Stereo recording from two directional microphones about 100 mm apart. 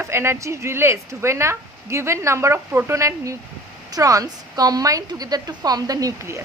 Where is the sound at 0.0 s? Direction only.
25° right (ahead or behind).